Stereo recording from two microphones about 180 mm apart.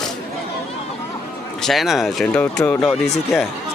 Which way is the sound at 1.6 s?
Centre (ahead or behind).